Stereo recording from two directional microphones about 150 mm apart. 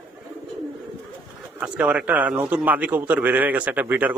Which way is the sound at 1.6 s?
10° right (ahead or behind).